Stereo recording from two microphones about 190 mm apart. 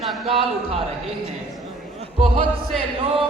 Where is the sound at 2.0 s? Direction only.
30° right (ahead or behind).